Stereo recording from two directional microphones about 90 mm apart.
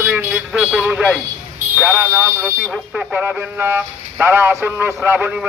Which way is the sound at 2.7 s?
10° right (ahead or behind).